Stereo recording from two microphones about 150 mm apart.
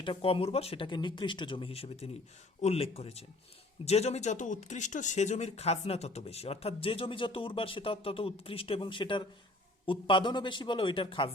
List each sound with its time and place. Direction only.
0.0 s speech: 35° left (ahead or behind)